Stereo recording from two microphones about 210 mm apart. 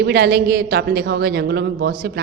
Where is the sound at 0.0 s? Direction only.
50° right (ahead or behind).